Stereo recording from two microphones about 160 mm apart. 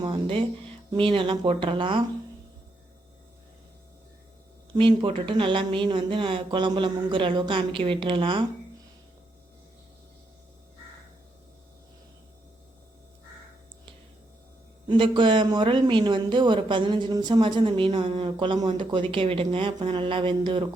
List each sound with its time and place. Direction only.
0.0 s speech: 30° right (ahead or behind)
4.7 s speech: 35° right (ahead or behind)
14.8 s speech: 30° right (ahead or behind)